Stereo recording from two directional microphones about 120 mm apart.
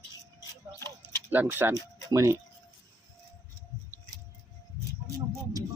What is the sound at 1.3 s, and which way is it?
Speech, 15° right (ahead or behind).